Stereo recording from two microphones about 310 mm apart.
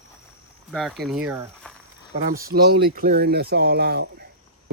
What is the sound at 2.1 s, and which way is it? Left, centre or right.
Speech, right.